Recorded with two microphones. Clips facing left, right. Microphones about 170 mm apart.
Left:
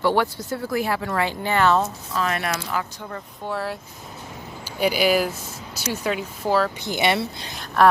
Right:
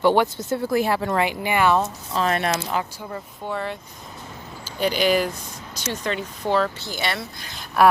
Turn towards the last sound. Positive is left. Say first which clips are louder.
# even
turn(degrees=-10)  # may be behind; listen again after turning